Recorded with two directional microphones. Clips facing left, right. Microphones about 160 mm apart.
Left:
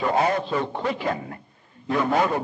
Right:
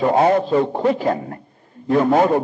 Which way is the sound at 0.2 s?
40° right (ahead or behind).